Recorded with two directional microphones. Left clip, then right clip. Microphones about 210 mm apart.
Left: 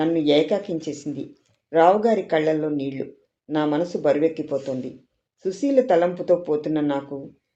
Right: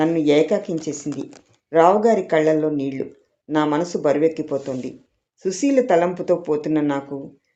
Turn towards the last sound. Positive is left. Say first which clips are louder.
# right 2 dB
turn(degrees=-25)  # may be behind; listen again after turning